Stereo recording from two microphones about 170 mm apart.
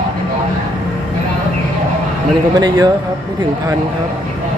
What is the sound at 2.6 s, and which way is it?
Speech, 25° right (ahead or behind).